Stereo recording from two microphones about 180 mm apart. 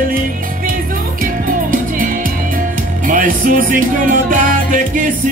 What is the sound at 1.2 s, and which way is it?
Music, 50° right (ahead or behind).